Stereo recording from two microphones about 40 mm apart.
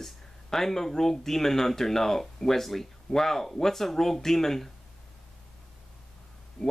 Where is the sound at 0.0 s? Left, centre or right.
Centre.